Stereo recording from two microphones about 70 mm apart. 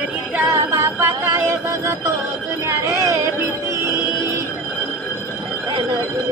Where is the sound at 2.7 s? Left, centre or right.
Right.